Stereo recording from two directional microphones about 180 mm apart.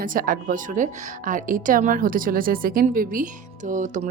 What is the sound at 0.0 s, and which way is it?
A woman's voice, 50° right (ahead or behind).